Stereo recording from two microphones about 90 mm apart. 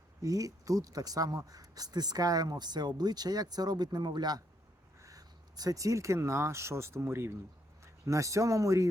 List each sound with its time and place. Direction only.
0.2 s speech: 40° right (ahead or behind)
4.9 s speech: 40° right (ahead or behind)